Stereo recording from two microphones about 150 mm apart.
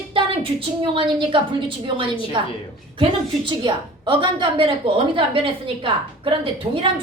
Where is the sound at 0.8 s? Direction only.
35° right (ahead or behind).